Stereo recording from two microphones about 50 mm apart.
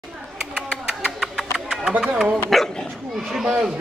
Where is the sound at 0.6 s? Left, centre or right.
Centre.